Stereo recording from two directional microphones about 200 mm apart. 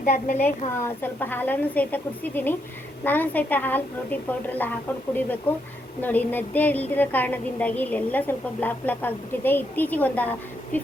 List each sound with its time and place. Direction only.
0.0 s a woman's voice: 40° left (ahead or behind)
0.8 s a woman's voice: 10° left (ahead or behind)